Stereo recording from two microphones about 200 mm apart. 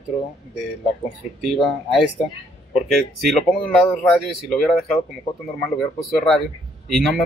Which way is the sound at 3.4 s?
5° left (ahead or behind).